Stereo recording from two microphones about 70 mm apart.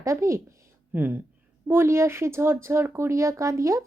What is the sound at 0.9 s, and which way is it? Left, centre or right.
Speech, right.